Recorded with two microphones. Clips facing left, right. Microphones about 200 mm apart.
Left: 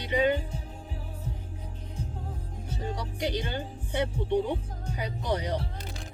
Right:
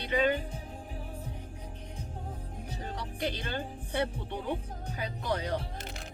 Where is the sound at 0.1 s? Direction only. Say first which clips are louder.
Left 2 dB; 20° left (ahead or behind).